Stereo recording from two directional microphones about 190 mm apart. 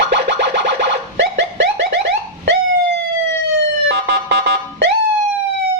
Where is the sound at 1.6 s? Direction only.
65° right (ahead or behind).